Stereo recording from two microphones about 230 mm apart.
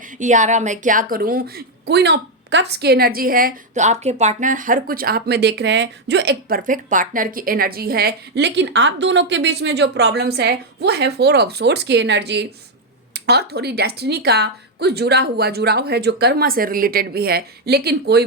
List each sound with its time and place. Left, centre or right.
0.2 s a woman's voice: right